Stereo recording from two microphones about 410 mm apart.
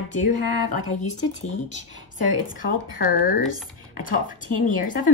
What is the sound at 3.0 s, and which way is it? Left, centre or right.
Speech, left.